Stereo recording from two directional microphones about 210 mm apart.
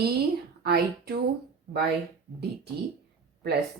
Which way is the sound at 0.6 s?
50° right (ahead or behind).